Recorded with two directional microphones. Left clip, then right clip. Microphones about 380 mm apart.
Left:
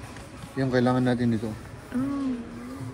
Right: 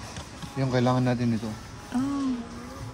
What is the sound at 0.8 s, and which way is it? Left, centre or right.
Speech, centre.